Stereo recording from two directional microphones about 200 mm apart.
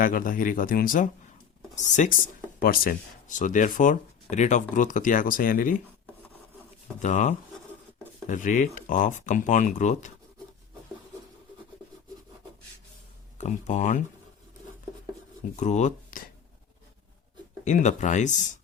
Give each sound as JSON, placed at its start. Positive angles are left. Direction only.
{"t": 0.0, "sound": "speech", "side_deg": 45}
{"t": 7.0, "sound": "speech", "side_deg": 35}
{"t": 13.4, "sound": "speech", "side_deg": 40}
{"t": 15.5, "sound": "speech", "side_deg": 35}
{"t": 17.7, "sound": "speech", "side_deg": 35}